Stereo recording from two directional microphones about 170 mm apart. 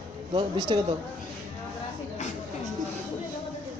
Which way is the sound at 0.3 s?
25° right (ahead or behind).